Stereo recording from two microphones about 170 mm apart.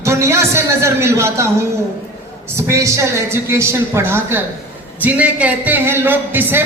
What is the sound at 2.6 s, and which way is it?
Speech, 15° right (ahead or behind).